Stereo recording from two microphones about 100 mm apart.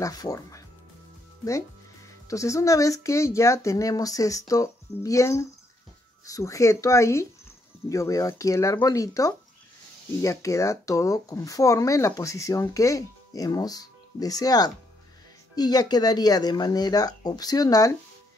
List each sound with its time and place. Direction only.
0.0 s speech: 35° left (ahead or behind)
2.2 s speech: 30° left (ahead or behind)